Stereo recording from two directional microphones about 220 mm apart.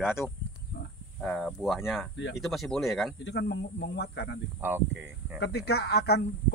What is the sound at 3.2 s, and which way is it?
Speech, 50° left (ahead or behind).